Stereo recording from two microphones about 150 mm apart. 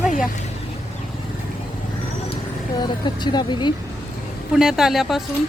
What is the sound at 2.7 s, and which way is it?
Speech, 30° left (ahead or behind).